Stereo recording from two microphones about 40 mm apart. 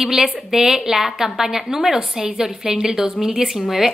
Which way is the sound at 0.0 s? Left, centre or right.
Centre.